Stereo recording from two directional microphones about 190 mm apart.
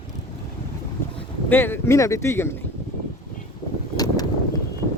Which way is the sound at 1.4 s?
10° left (ahead or behind).